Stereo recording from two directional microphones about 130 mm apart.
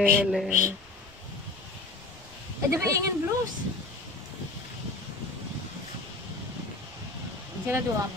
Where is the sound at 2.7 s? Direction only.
25° right (ahead or behind).